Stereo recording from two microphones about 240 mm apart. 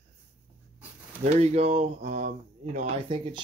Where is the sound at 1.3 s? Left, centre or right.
Right.